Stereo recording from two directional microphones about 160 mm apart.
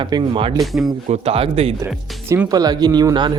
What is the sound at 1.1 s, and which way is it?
Speech, 40° right (ahead or behind).